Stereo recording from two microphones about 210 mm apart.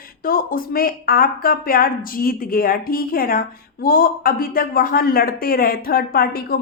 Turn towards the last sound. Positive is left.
turn(degrees=45)  # may be behind; listen again after turning